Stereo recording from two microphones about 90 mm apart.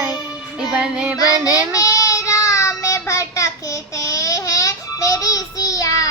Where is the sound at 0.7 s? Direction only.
10° right (ahead or behind).